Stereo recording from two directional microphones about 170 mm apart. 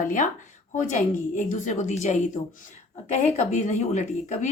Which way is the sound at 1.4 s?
45° left (ahead or behind).